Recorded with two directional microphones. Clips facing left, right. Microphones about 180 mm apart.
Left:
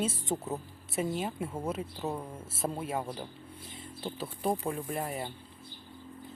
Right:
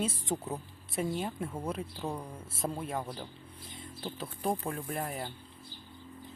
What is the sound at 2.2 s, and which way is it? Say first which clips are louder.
Speech: left 2 dB; 25° left (ahead or behind).